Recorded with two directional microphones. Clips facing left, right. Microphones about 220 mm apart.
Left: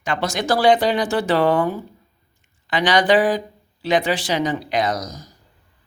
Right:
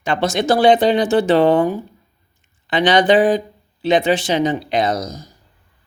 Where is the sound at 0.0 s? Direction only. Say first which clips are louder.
Right 5 dB; 25° right (ahead or behind).